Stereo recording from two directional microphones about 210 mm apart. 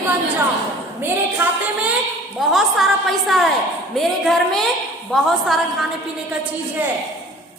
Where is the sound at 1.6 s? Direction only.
5° right (ahead or behind).